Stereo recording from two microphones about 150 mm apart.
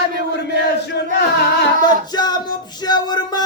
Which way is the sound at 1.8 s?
25° left (ahead or behind).